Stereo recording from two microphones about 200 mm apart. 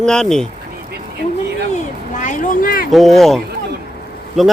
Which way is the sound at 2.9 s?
Centre (ahead or behind).